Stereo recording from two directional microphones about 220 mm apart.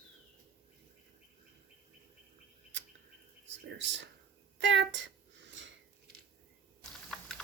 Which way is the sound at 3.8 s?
55° right (ahead or behind).